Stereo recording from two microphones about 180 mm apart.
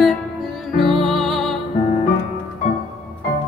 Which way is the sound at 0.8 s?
30° right (ahead or behind).